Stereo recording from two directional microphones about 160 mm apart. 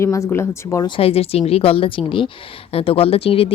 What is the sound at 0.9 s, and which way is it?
Speech, 35° left (ahead or behind).